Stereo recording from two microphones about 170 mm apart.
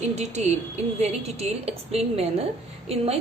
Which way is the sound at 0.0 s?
40° right (ahead or behind).